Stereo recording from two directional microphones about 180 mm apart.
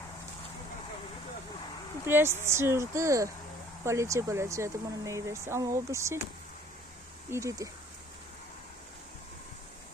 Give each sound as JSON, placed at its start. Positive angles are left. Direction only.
{"t": 2.0, "sound": "speech", "side_deg": -15}
{"t": 7.3, "sound": "speech", "side_deg": -15}